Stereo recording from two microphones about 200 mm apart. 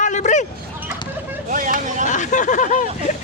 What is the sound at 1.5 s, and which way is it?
Speech, 40° right (ahead or behind).